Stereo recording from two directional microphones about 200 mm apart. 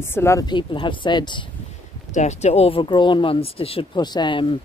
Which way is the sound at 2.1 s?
35° left (ahead or behind).